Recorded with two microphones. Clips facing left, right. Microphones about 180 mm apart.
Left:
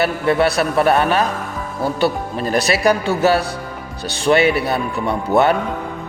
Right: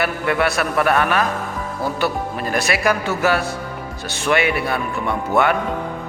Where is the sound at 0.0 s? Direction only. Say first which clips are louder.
Left 4 dB; 30° left (ahead or behind).